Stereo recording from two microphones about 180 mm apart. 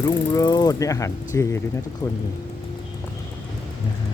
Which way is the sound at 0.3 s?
20° left (ahead or behind).